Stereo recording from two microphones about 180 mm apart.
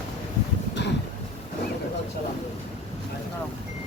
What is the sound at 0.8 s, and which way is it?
Vehicle, 70° left (ahead or behind).